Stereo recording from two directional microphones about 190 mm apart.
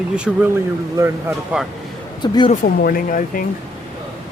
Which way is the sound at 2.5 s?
50° left (ahead or behind).